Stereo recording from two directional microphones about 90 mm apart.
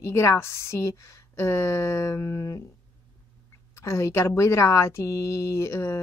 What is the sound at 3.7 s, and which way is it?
A woman's voice, 35° left (ahead or behind).